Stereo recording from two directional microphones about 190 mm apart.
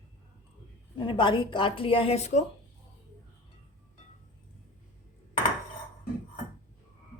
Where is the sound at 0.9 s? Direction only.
25° left (ahead or behind).